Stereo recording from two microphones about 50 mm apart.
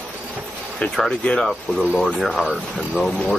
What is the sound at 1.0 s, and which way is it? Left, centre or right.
Speech, centre.